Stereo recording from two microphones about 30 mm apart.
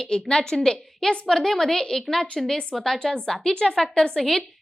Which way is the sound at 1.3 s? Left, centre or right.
Centre.